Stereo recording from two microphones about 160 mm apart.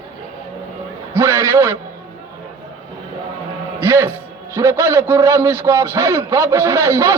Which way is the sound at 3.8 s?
15° right (ahead or behind).